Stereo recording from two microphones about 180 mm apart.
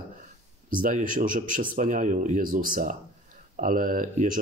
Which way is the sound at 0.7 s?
50° right (ahead or behind).